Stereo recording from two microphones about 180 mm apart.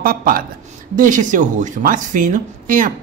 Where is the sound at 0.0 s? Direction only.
55° right (ahead or behind).